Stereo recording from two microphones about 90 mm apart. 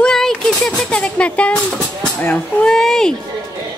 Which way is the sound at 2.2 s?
15° left (ahead or behind).